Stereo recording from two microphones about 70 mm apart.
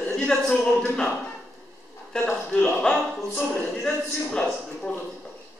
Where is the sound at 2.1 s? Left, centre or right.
Centre.